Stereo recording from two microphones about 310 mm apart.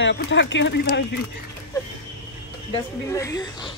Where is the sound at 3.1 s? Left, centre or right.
Centre.